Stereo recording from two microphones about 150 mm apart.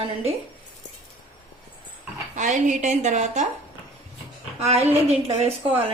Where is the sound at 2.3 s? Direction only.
55° right (ahead or behind).